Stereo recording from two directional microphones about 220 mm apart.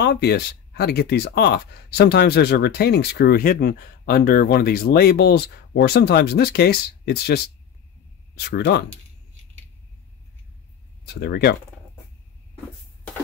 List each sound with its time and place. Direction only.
0.0 s speech: 50° left (ahead or behind)
11.1 s speech: 45° left (ahead or behind)